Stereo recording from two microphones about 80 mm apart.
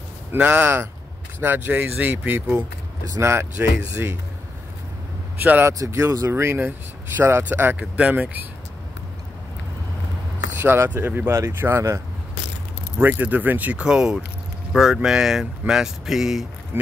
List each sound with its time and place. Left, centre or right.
0.3 s speech: centre
5.4 s speech: right
10.6 s speech: right
13.0 s speech: right; by 16.4 s centre
16.7 s speech: right